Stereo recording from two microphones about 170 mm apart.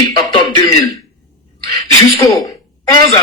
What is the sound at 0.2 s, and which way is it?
Throat clearing, 25° left (ahead or behind).